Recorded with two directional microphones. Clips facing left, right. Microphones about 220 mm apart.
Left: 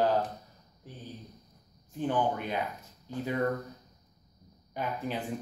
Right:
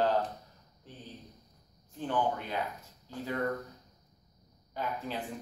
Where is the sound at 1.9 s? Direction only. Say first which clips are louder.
Left 2 dB; 15° left (ahead or behind).